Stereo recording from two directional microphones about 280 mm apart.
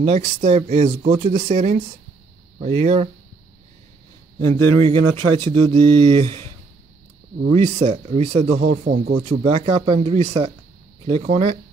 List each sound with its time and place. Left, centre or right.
0.0 s speech: right
4.4 s speech: centre